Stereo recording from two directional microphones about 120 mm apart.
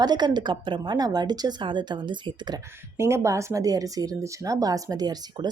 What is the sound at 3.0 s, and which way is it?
Speech, 25° right (ahead or behind).